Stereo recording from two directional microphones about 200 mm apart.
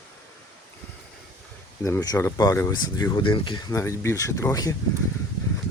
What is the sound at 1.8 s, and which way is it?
Speech, 15° left (ahead or behind).